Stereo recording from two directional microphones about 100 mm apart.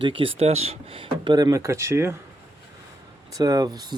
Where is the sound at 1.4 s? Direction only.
30° right (ahead or behind).